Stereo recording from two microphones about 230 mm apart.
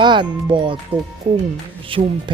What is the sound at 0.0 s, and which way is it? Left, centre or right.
Speech, centre.